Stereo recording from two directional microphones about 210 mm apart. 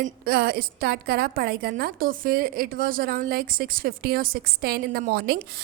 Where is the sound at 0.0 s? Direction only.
50° right (ahead or behind).